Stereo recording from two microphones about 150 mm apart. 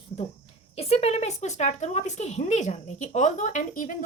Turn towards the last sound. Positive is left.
turn(degrees=60)  # may be behind; listen again after turning